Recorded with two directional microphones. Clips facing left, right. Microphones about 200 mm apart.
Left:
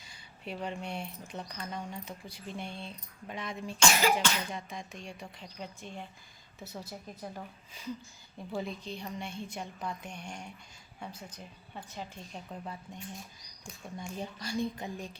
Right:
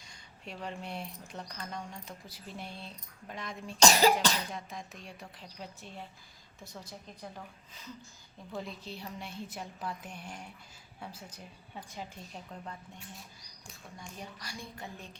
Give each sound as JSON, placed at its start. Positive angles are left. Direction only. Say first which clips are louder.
{"t": 0.0, "sound": "speech", "louder": "left 4 dB", "side_deg": 5}
{"t": 3.8, "sound": "cough", "louder": "right 3 dB", "side_deg": -35}
{"t": 4.5, "sound": "a woman's voice", "louder": "left 2 dB", "side_deg": 0}
{"t": 8.5, "sound": "speech", "louder": "left 4 dB", "side_deg": -5}
{"t": 12.5, "sound": "a woman's voice", "louder": "left 3 dB", "side_deg": 15}
{"t": 14.2, "sound": "a woman's voice", "louder": "left 12 dB", "side_deg": 25}